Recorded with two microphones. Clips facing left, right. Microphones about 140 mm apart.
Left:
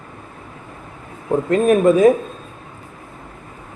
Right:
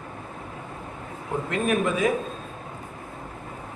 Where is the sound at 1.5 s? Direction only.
40° left (ahead or behind).